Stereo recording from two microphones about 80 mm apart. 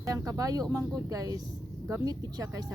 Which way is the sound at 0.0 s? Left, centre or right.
Right.